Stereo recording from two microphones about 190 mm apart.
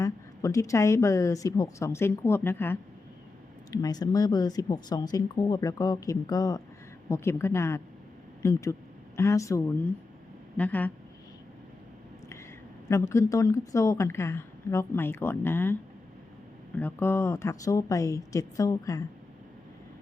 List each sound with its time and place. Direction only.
0.0 s a woman's voice: 15° left (ahead or behind)
12.9 s a woman's voice: 15° left (ahead or behind)